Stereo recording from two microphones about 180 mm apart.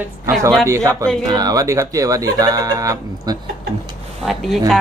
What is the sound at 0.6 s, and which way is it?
Speech, 15° right (ahead or behind).